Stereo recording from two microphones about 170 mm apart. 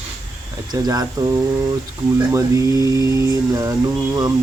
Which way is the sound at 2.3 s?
20° right (ahead or behind).